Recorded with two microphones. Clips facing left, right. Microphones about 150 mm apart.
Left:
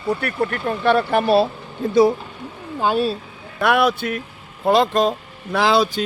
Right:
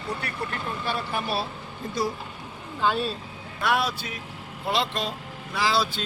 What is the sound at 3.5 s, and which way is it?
Speech, 60° left (ahead or behind).